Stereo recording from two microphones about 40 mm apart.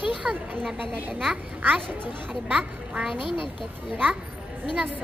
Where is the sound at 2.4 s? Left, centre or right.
Right.